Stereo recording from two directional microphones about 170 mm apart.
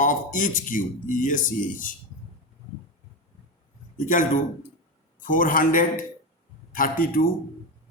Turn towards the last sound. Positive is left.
turn(degrees=55)  # may be behind; listen again after turning